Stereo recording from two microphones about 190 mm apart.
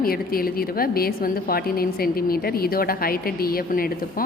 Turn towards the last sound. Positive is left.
turn(degrees=50)  # may be behind; listen again after turning